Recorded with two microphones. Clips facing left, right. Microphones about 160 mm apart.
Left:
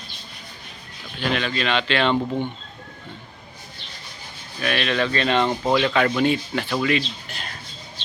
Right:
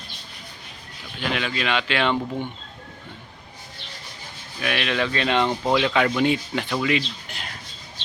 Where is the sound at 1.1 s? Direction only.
15° right (ahead or behind).